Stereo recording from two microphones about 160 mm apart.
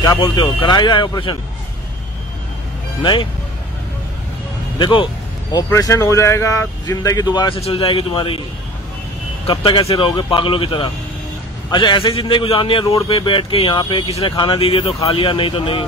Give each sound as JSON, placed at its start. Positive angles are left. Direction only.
{"t": 0.6, "sound": "speech", "side_deg": 25}
{"t": 3.0, "sound": "speech", "side_deg": 30}
{"t": 4.7, "sound": "speech", "side_deg": 30}
{"t": 9.5, "sound": "speech", "side_deg": 35}